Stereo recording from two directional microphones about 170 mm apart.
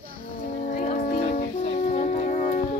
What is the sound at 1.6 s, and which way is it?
Music, 40° left (ahead or behind).